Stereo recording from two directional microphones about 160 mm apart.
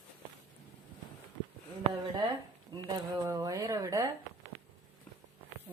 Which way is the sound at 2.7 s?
25° right (ahead or behind).